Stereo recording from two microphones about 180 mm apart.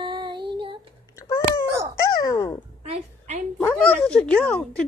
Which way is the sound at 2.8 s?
40° right (ahead or behind).